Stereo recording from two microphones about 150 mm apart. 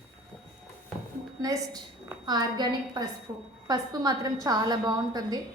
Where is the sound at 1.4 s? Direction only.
25° right (ahead or behind).